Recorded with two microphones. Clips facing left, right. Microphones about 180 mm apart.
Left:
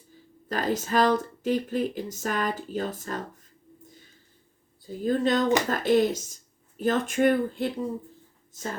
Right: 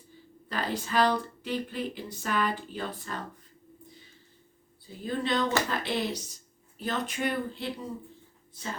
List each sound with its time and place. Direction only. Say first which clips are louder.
0.4 s speech: left 5 dB; 45° left (ahead or behind)
5.0 s speech: left 6 dB; 45° left (ahead or behind)